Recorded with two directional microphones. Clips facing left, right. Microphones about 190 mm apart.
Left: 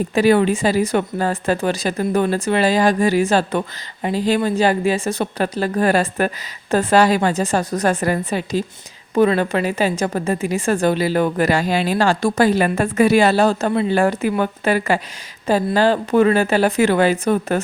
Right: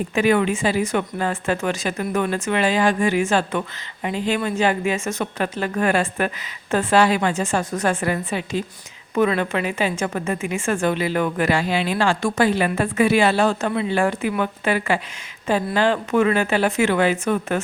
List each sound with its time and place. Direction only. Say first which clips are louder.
0.1 s a woman's voice: left 4 dB; 35° left (ahead or behind)